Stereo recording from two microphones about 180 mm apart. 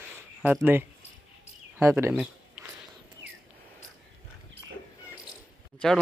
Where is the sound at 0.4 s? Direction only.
5° right (ahead or behind).